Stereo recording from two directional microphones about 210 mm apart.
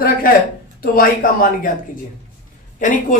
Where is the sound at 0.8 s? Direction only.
45° left (ahead or behind).